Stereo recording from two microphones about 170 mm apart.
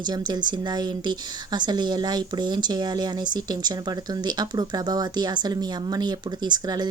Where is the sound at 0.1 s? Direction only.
25° right (ahead or behind).